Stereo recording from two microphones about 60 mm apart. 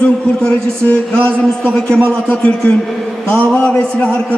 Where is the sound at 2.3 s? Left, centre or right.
Centre.